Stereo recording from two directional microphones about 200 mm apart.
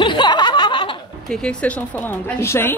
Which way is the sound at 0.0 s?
25° left (ahead or behind).